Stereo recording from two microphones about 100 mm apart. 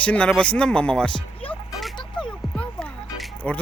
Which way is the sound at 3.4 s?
10° left (ahead or behind).